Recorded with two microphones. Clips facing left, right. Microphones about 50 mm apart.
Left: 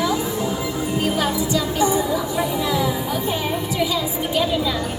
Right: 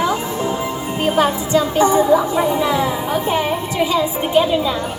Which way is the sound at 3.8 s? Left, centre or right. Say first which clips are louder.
Right 7 dB; right.